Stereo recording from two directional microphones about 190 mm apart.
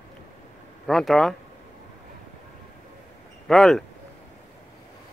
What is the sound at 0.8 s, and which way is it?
Speech, centre (ahead or behind).